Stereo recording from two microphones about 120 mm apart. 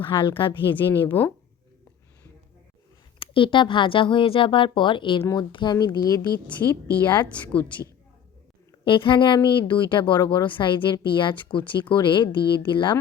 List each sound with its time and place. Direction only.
0.0 s speech: 45° left (ahead or behind)
0.9 s a woman's voice: 15° left (ahead or behind)
3.2 s a woman's voice: 45° left (ahead or behind); by 7.7 s 15° left (ahead or behind)
8.8 s speech: 45° left (ahead or behind)